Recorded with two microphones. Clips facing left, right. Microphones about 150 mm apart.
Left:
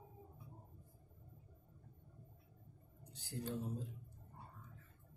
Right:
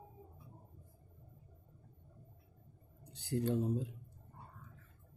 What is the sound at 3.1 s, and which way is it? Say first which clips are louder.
Speech: right 10 dB; 70° right (ahead or behind).